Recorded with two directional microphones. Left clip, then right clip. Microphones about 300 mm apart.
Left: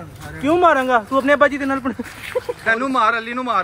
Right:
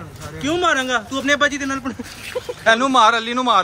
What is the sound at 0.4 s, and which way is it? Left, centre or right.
Speech, centre.